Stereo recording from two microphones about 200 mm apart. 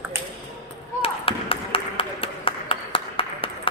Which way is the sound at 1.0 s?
25° left (ahead or behind).